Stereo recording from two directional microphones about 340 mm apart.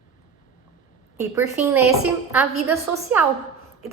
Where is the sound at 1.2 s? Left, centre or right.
Centre.